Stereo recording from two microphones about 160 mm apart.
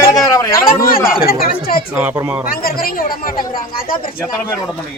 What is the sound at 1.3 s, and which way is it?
Speech, 65° left (ahead or behind).